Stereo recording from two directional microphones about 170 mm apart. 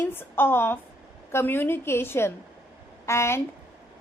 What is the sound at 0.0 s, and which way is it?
A woman's voice, 15° left (ahead or behind).